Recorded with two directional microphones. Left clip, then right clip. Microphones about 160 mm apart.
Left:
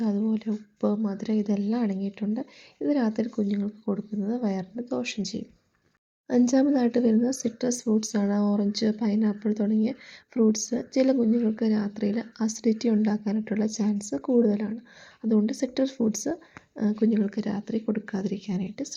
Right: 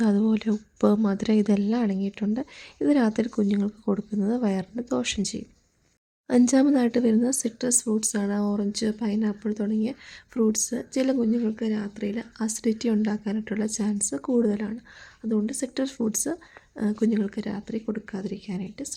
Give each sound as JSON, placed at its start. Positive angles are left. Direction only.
{"t": 0.0, "sound": "speech", "side_deg": -40}
{"t": 1.6, "sound": "a woman's voice", "side_deg": -25}
{"t": 12.5, "sound": "speech", "side_deg": -15}
{"t": 15.2, "sound": "speech", "side_deg": -5}